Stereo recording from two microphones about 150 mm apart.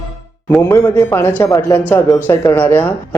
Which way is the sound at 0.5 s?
15° left (ahead or behind).